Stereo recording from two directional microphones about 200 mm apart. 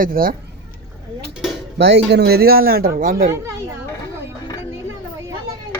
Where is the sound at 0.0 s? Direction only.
45° right (ahead or behind).